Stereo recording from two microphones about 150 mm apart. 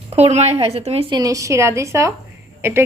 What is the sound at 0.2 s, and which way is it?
Speech, 45° right (ahead or behind).